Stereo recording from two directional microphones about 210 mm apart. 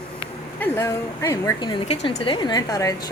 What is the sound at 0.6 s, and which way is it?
A woman's voice, 15° left (ahead or behind).